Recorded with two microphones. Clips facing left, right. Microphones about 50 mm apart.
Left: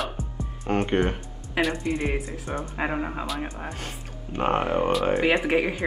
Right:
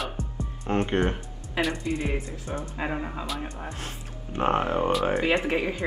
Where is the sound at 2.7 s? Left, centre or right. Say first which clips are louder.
Left 4 dB; left.